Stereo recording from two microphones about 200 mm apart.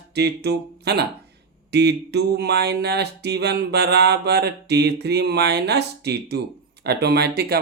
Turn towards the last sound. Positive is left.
turn(degrees=-50)  # may be behind; listen again after turning